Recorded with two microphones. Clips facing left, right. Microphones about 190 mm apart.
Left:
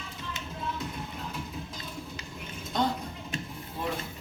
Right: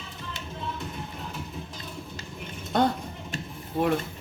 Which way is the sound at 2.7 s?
60° right (ahead or behind).